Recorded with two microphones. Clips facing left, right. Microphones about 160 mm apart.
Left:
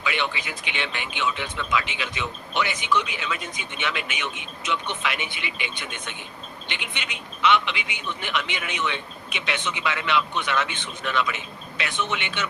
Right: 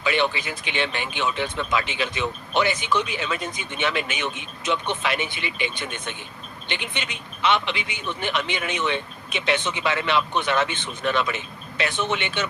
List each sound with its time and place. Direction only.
0.0 s speech: 35° right (ahead or behind)